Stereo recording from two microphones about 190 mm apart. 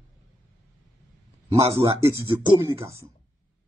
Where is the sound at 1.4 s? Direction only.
15° right (ahead or behind).